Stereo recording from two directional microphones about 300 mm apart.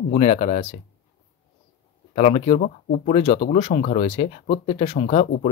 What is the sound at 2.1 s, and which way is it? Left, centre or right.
Speech, left.